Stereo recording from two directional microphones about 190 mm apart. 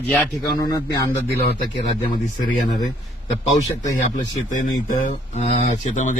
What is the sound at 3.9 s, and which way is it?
Speech, 45° left (ahead or behind).